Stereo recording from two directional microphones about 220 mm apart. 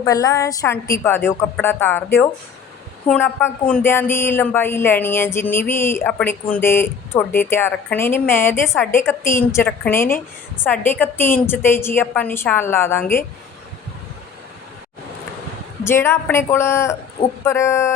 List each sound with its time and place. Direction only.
0.0 s a woman's voice: 15° left (ahead or behind)
15.8 s a woman's voice: 10° left (ahead or behind)